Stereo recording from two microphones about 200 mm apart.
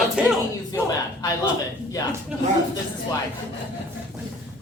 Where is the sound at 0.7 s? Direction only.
20° left (ahead or behind).